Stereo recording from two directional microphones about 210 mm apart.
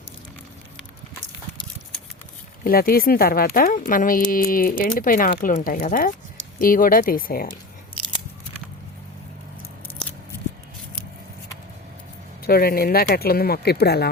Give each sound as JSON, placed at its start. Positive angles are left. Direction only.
{"t": 2.6, "sound": "speech", "side_deg": 45}
{"t": 12.4, "sound": "speech", "side_deg": 45}